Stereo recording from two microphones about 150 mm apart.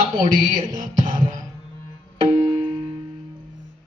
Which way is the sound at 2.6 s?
35° right (ahead or behind).